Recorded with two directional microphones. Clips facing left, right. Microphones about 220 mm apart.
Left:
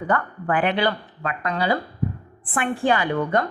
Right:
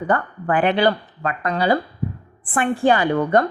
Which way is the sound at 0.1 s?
35° right (ahead or behind).